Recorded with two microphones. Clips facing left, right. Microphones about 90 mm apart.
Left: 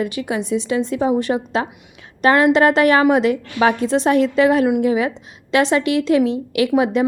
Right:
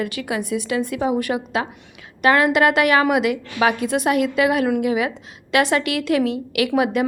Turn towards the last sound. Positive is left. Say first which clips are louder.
# left 3 dB
turn(degrees=25)  # may be behind; listen again after turning